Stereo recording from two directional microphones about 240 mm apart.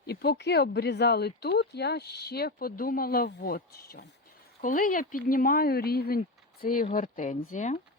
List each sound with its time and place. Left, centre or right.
0.1 s speech: left